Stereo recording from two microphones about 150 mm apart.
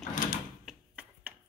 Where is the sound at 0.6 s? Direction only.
Centre (ahead or behind).